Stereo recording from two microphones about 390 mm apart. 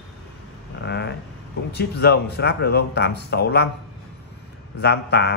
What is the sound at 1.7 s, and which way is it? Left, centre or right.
Speech, left.